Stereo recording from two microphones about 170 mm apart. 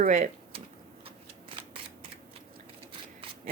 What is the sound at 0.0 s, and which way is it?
Speech, 45° right (ahead or behind).